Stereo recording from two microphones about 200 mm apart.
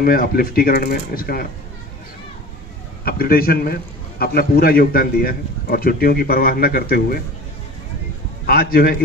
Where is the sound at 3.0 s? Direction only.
50° left (ahead or behind).